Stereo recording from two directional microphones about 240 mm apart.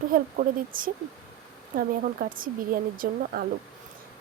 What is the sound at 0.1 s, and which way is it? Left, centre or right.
Speech, right.